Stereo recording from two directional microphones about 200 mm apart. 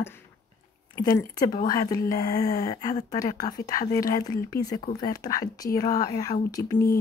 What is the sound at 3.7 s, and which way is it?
Speech, 45° left (ahead or behind).